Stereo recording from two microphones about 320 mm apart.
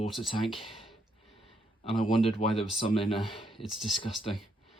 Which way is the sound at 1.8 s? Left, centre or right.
Centre.